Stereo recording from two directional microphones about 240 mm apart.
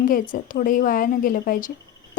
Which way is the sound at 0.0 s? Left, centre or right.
Left.